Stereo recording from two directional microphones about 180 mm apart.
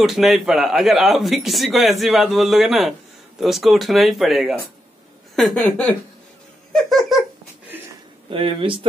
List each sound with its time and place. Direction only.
0.0 s a man's voice: centre (ahead or behind)
6.7 s giggle: centre (ahead or behind)
8.3 s speech: 30° right (ahead or behind)